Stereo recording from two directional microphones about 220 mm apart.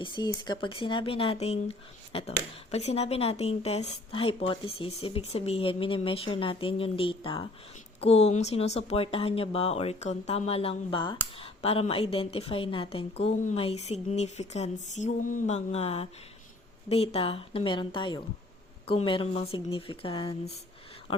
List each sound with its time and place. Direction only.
0.0 s a woman's voice: 20° left (ahead or behind)